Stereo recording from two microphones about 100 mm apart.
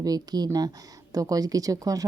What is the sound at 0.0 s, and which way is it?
Speech, 40° right (ahead or behind).